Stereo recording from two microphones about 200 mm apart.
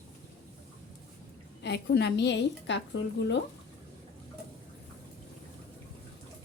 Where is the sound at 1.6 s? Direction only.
55° left (ahead or behind).